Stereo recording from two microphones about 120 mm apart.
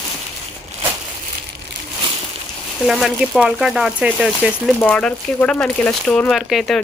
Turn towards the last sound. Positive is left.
turn(degrees=0)  # may be behind; listen again after turning